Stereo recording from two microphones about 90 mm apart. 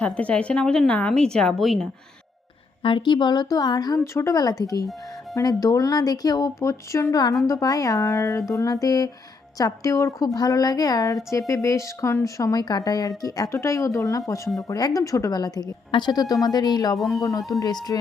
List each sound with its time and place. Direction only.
0.0 s a woman's voice: 15° left (ahead or behind)
2.8 s a woman's voice: 65° left (ahead or behind); by 4.0 s 45° left (ahead or behind)
4.0 s speech: 30° left (ahead or behind)
4.4 s a woman's voice: 45° left (ahead or behind)